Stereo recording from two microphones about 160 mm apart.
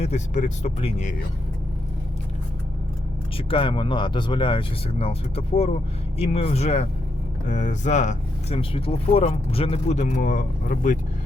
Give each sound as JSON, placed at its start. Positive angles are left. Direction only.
{"t": 0.0, "sound": "speech", "side_deg": 45}
{"t": 3.3, "sound": "speech", "side_deg": 35}